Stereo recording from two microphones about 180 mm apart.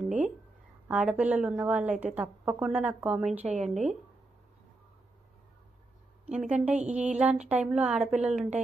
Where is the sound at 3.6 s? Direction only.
40° right (ahead or behind).